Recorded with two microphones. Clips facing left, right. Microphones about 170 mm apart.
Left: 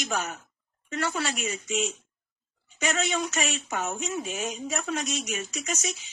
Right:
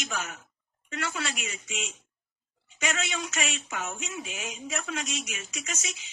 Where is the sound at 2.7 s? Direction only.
40° left (ahead or behind).